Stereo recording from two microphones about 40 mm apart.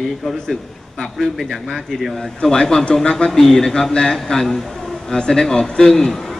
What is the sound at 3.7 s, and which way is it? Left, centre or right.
A man's voice, centre.